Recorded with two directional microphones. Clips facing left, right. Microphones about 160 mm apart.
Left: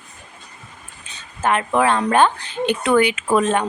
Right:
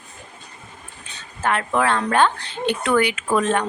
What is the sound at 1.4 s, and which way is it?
Speech, 20° left (ahead or behind).